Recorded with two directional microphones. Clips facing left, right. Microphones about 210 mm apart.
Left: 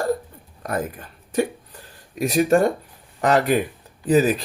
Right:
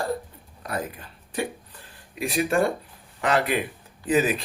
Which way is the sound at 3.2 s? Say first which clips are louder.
Left 5 dB; 40° left (ahead or behind).